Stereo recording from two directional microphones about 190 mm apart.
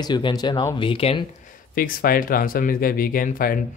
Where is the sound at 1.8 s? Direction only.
50° left (ahead or behind).